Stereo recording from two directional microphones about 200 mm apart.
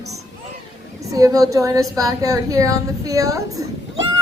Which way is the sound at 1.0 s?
15° right (ahead or behind).